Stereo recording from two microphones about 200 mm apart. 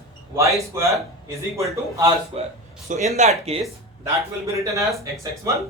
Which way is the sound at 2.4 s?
30° right (ahead or behind).